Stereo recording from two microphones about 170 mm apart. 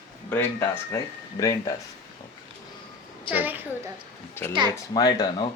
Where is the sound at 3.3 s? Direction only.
10° right (ahead or behind).